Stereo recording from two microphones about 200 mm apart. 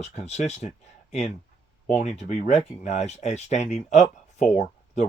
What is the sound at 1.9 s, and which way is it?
Speech, 35° left (ahead or behind).